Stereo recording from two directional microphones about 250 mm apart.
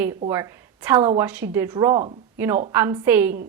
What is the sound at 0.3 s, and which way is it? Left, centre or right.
A woman's voice, centre.